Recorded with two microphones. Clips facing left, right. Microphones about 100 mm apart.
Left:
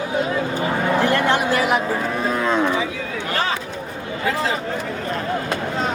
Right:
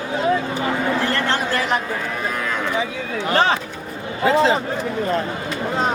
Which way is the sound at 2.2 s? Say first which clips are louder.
Left 7 dB; 25° left (ahead or behind).